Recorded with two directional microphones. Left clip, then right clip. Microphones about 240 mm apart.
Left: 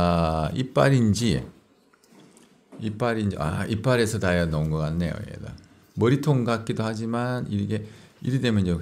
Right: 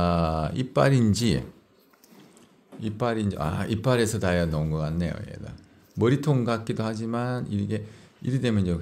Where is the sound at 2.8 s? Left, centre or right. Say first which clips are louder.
Left 1 dB; centre.